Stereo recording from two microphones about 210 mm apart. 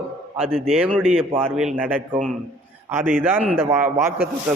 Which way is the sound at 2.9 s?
10° right (ahead or behind).